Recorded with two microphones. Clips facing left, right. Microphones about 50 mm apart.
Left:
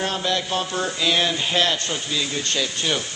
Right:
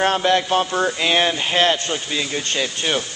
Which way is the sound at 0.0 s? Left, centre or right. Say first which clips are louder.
Right 7 dB; right.